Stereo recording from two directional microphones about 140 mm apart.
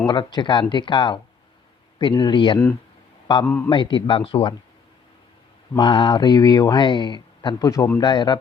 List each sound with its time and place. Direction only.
0.1 s speech: 30° left (ahead or behind)
3.4 s a man's voice: 15° left (ahead or behind)
3.7 s speech: 35° left (ahead or behind)
5.7 s speech: 35° left (ahead or behind)